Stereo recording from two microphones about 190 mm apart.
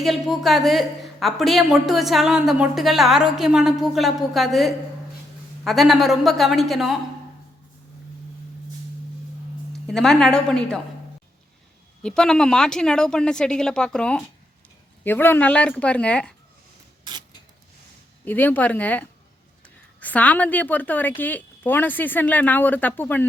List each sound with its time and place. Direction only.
0.0 s a woman's voice: centre (ahead or behind)
9.8 s a woman's voice: 5° left (ahead or behind)
12.0 s a woman's voice: 5° left (ahead or behind)
17.0 s a sound: 25° right (ahead or behind)
18.3 s a woman's voice: 10° left (ahead or behind)